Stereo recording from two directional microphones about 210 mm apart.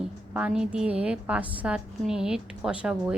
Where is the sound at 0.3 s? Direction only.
5° right (ahead or behind).